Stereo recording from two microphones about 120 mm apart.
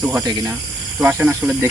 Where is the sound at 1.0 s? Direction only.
15° right (ahead or behind).